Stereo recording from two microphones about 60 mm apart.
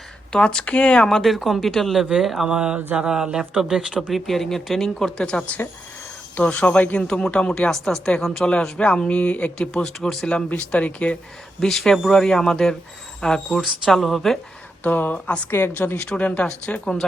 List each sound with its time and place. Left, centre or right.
0.3 s speech: centre
2.5 s a sound: centre
4.1 s speech: centre
10.2 s speech: left
11.6 s speech: centre
14.8 s a woman's voice: left
16.0 s speech: centre